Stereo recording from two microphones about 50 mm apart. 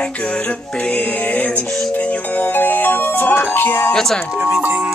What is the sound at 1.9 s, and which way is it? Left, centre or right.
Speech, left.